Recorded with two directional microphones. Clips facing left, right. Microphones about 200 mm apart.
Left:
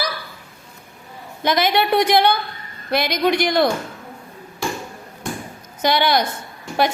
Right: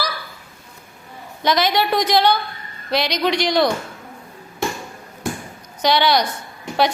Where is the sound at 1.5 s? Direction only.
55° left (ahead or behind).